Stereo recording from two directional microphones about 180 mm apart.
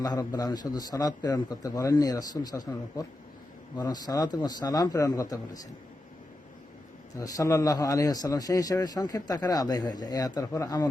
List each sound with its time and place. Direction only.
0.0 s a man's voice: 20° left (ahead or behind)
7.2 s a man's voice: 20° left (ahead or behind)